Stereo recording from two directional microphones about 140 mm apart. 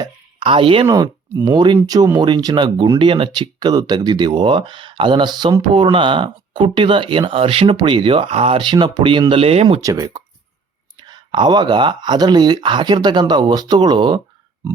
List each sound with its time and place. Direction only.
0.0 s speech: 40° right (ahead or behind)
0.9 s speech: 25° right (ahead or behind); by 9.8 s 45° right (ahead or behind)
9.8 s speech: 25° right (ahead or behind)